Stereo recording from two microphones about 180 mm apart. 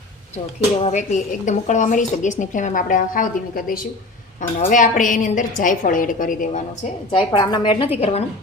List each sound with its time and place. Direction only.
0.8 s a woman's voice: 40° left (ahead or behind)
7.3 s a woman's voice: 25° left (ahead or behind)